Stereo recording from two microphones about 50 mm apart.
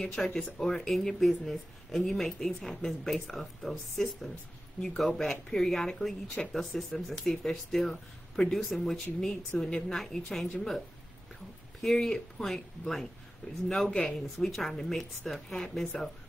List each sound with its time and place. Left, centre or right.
0.0 s speech: centre
11.8 s speech: centre
13.9 s speech: centre
15.5 s speech: centre